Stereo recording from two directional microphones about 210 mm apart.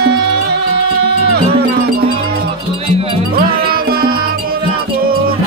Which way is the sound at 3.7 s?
45° right (ahead or behind).